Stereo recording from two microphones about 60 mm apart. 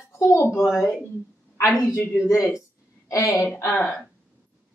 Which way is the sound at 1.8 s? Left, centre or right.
Left.